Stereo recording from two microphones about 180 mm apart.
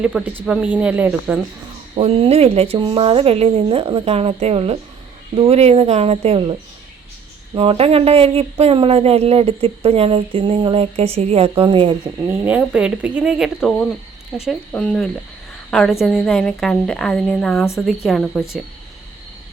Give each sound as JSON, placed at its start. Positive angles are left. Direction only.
{"t": 0.0, "sound": "speech", "side_deg": -5}
{"t": 2.0, "sound": "speech", "side_deg": -35}
{"t": 12.3, "sound": "a woman's voice", "side_deg": -5}